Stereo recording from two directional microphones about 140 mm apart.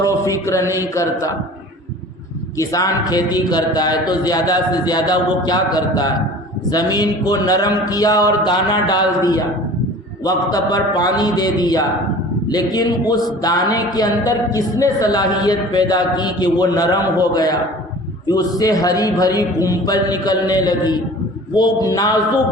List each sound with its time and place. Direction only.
0.0 s a man's voice: 20° left (ahead or behind)
2.6 s a man's voice: 25° left (ahead or behind)